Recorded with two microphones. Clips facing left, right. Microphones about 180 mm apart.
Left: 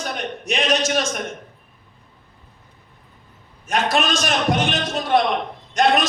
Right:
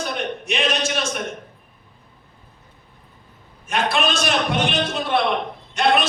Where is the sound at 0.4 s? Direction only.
40° left (ahead or behind).